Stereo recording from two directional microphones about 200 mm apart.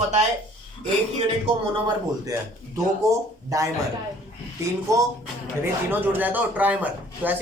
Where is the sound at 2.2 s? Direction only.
15° right (ahead or behind).